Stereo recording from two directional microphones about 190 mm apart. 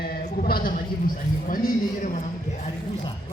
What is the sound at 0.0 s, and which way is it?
A woman's voice, 50° left (ahead or behind).